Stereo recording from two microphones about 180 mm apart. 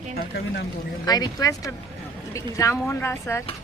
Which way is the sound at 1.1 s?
20° left (ahead or behind).